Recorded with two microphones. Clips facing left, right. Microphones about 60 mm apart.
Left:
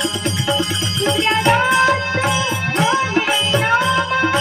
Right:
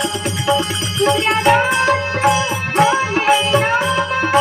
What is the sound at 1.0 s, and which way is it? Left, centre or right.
Music, centre.